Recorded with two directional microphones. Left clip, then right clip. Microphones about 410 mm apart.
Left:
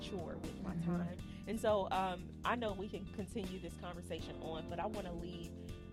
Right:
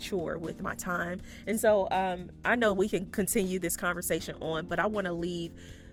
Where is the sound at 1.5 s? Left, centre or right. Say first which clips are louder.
Right 10 dB; right.